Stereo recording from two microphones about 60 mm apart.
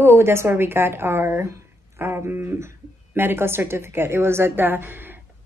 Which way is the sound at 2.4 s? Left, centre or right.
Right.